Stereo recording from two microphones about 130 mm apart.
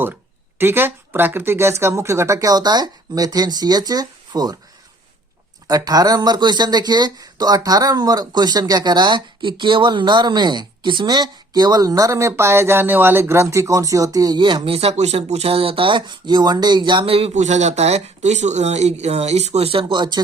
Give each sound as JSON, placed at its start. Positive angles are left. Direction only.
{"t": 0.6, "sound": "speech", "side_deg": -15}
{"t": 5.6, "sound": "speech", "side_deg": -30}
{"t": 17.3, "sound": "speech", "side_deg": -65}